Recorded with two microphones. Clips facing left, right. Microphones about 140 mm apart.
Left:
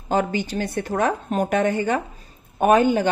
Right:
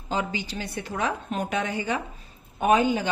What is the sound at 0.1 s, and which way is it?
A woman's voice, 50° left (ahead or behind).